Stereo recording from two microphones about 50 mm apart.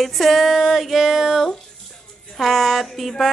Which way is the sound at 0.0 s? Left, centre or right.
Centre.